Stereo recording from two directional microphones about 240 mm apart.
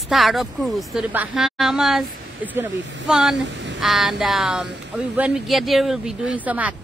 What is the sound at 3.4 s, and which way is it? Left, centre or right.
Speech, right.